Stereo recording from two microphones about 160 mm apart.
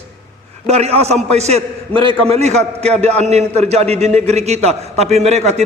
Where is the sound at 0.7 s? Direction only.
40° right (ahead or behind).